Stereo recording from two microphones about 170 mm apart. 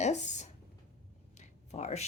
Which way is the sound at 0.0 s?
45° left (ahead or behind).